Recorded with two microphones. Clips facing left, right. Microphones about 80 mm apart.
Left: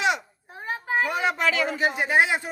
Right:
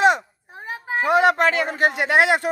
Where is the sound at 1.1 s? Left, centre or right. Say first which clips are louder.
Right 9 dB; right.